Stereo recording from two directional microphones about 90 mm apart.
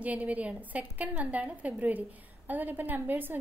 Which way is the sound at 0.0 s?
15° right (ahead or behind).